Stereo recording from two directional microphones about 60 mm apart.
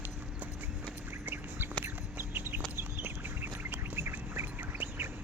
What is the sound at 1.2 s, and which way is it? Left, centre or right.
Duck, right.